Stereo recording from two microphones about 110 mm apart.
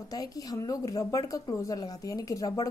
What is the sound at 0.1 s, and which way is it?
A woman's voice, 35° left (ahead or behind).